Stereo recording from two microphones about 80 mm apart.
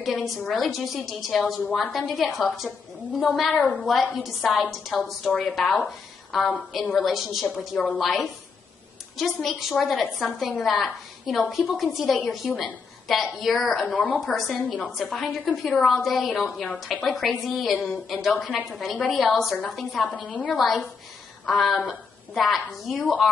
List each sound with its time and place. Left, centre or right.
0.0 s a woman's voice: centre
3.5 s a woman's voice: centre
3.8 s a woman's voice: centre
7.7 s a woman's voice: centre
8.0 s a woman's voice: centre
13.9 s a woman's voice: centre
15.0 s a woman's voice: centre
15.8 s a woman's voice: centre
20.1 s a woman's voice: centre
20.5 s a woman's voice: centre